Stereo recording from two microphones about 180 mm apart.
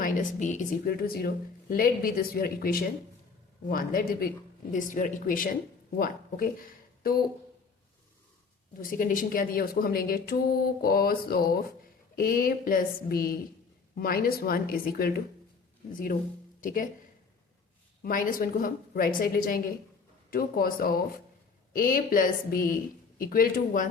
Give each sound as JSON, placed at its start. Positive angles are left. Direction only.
{"t": 0.0, "sound": "a woman's voice", "side_deg": 45}
{"t": 8.8, "sound": "a woman's voice", "side_deg": 50}
{"t": 18.0, "sound": "a woman's voice", "side_deg": 50}